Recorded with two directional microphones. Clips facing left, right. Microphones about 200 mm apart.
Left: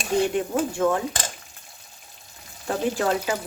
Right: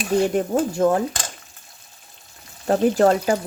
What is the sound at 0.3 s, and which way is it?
Speech, 40° right (ahead or behind).